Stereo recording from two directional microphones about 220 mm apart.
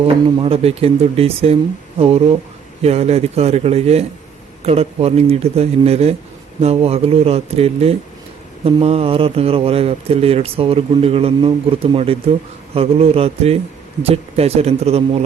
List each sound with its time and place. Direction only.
0.0 s a man's voice: 25° right (ahead or behind)